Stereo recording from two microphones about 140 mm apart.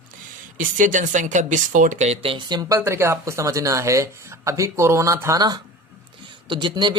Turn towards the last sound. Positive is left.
turn(degrees=-35)  # may be behind; listen again after turning